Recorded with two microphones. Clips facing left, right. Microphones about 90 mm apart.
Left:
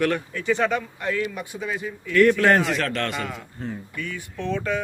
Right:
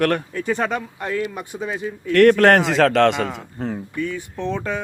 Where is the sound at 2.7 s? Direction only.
90° right.